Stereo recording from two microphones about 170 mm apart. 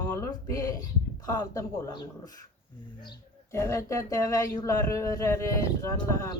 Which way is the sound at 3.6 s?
15° left (ahead or behind).